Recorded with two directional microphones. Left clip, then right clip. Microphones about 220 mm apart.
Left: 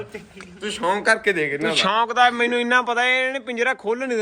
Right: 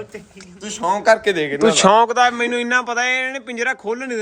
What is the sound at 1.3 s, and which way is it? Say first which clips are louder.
Speech: right 5 dB; 40° right (ahead or behind).